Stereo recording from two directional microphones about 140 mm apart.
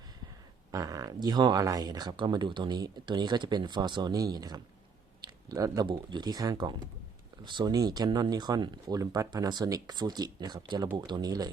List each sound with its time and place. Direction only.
0.7 s speech: 25° right (ahead or behind)